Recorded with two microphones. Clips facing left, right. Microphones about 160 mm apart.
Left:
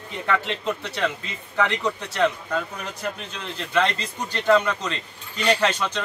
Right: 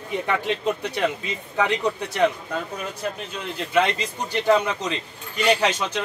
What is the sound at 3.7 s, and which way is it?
Speech, 10° right (ahead or behind).